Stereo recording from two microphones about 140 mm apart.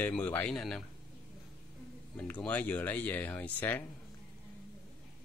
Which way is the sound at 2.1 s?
10° left (ahead or behind).